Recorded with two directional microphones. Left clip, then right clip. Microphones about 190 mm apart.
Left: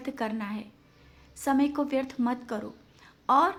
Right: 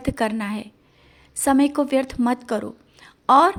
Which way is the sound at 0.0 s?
40° right (ahead or behind).